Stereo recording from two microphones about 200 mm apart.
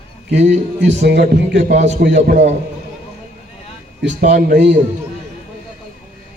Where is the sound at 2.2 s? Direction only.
35° right (ahead or behind).